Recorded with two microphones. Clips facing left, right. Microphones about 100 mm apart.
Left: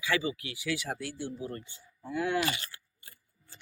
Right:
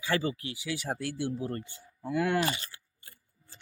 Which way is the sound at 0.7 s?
40° right (ahead or behind).